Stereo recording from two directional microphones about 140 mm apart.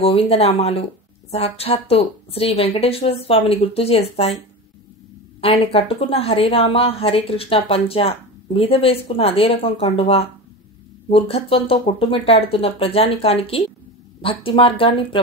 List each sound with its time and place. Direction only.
0.0 s speech: 45° left (ahead or behind)
5.4 s a woman's voice: 40° left (ahead or behind)